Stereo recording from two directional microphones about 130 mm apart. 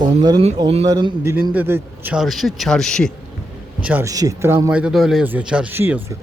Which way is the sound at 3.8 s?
10° right (ahead or behind).